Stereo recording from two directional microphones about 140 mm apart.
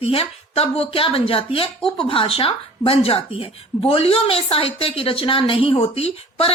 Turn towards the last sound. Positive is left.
turn(degrees=40)  # may be behind; listen again after turning